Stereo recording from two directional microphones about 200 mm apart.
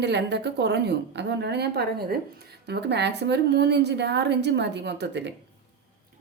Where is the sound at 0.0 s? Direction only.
60° right (ahead or behind).